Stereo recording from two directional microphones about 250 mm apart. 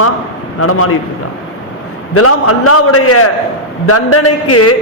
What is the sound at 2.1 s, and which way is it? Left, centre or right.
A man's voice, left.